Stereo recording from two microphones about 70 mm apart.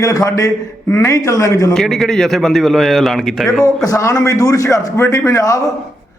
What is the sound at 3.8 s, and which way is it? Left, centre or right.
A man's voice, left.